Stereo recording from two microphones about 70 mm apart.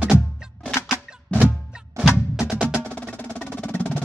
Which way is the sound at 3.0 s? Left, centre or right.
Left.